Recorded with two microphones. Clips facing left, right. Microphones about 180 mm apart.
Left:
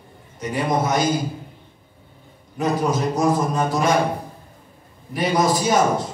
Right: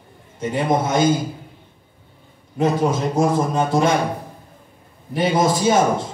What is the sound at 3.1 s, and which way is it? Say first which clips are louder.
Speech: right 1 dB; 30° right (ahead or behind).